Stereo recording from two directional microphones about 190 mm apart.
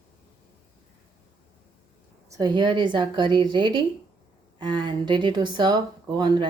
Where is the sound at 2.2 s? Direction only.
20° right (ahead or behind).